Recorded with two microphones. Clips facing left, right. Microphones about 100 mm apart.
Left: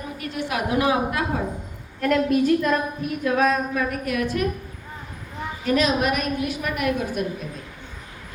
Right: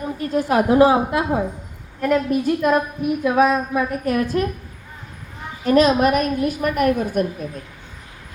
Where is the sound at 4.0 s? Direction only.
35° right (ahead or behind).